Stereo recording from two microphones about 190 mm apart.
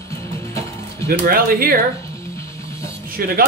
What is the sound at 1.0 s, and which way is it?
Speech, 50° right (ahead or behind).